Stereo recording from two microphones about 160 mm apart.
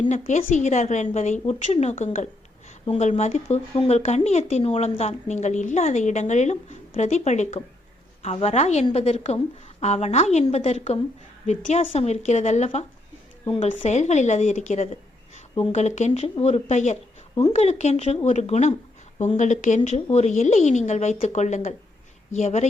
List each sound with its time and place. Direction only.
0.1 s a woman's voice: 50° left (ahead or behind)
3.1 s a woman's voice: 45° left (ahead or behind)